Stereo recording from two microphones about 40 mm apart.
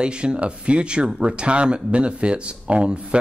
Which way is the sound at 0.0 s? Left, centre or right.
Right.